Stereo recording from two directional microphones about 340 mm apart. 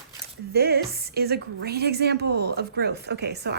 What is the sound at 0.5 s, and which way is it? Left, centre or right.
A woman's voice, right.